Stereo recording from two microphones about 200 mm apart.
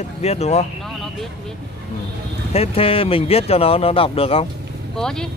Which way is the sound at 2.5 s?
30° left (ahead or behind).